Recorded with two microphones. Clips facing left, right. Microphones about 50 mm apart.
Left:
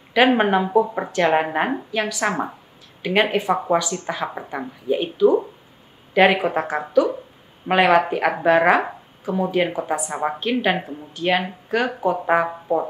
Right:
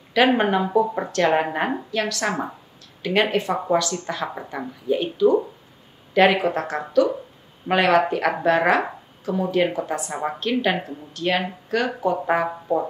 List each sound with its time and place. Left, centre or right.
0.4 s speech: centre